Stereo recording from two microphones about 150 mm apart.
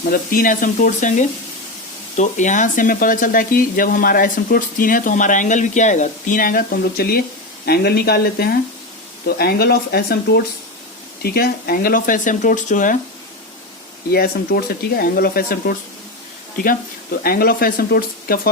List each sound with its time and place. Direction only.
0.1 s speech: 70° left (ahead or behind)
14.1 s speech: 90° left
17.2 s speech: 80° left